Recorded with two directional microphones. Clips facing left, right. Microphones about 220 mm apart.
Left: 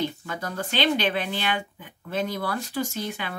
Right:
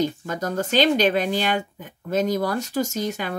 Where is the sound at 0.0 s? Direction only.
40° right (ahead or behind).